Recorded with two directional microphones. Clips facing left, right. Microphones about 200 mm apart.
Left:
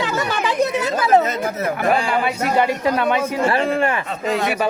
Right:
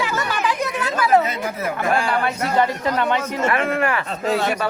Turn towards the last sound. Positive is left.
turn(degrees=0)  # may be behind; listen again after turning